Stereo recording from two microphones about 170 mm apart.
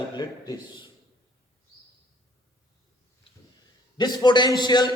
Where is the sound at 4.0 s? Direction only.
25° left (ahead or behind).